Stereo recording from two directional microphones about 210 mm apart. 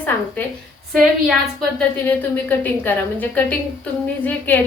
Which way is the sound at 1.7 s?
10° left (ahead or behind).